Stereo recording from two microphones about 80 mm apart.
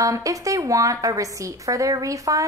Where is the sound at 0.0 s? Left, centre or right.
Right.